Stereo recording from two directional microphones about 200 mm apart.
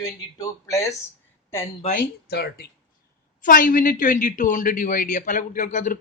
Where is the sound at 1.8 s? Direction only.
35° left (ahead or behind).